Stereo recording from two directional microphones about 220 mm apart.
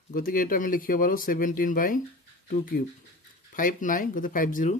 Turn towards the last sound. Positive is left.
turn(degrees=35)  # may be behind; listen again after turning